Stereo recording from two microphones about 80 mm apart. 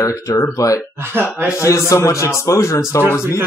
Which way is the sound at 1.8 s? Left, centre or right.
Left.